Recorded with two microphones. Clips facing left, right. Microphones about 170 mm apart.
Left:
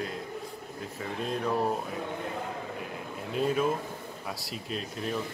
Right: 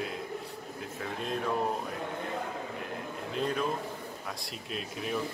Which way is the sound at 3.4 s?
5° left (ahead or behind).